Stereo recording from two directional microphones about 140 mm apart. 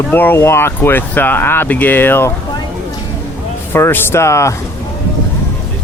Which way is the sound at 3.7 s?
15° left (ahead or behind).